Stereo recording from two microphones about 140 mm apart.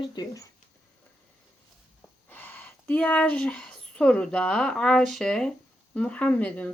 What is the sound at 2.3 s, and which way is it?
Speech, 15° left (ahead or behind).